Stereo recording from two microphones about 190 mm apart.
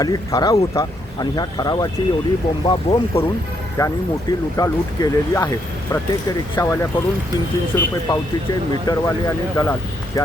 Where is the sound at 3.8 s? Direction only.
15° left (ahead or behind).